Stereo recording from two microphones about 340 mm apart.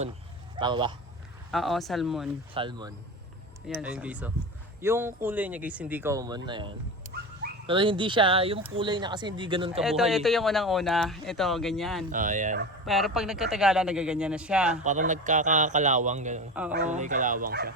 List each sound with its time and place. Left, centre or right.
0.6 s speech: centre
1.5 s speech: centre
2.6 s speech: centre
3.7 s speech: centre
9.8 s speech: centre
12.1 s a man's voice: right
12.8 s speech: centre
14.8 s a man's voice: right